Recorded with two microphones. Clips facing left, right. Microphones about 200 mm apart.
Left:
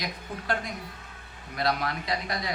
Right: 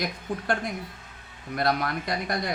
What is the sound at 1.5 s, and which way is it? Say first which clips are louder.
Speech: right 2 dB; 50° right (ahead or behind).